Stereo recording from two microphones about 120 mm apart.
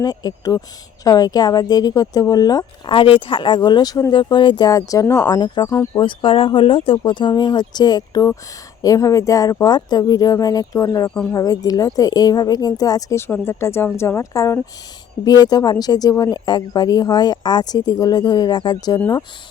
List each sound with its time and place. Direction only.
0.0 s speech: 35° left (ahead or behind)
2.9 s speech: 45° left (ahead or behind)
5.6 s speech: 20° left (ahead or behind)
6.0 s speech: 45° left (ahead or behind)